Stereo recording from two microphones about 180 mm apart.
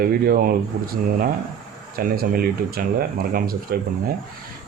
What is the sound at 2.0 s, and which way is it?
Speech, 55° right (ahead or behind).